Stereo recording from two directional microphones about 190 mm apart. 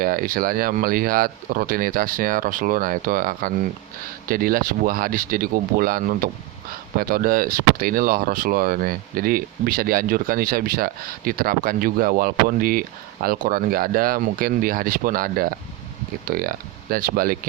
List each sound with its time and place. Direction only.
0.0 s speech: 50° right (ahead or behind)